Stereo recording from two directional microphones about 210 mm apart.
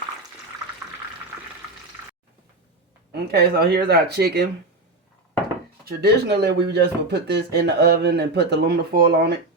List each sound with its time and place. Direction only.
3.1 s speech: 50° right (ahead or behind)
5.8 s speech: 50° right (ahead or behind)